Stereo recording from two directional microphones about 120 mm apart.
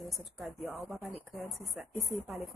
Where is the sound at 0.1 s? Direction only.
Centre (ahead or behind).